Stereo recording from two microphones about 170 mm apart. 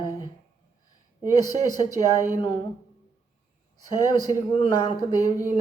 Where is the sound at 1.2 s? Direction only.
20° left (ahead or behind).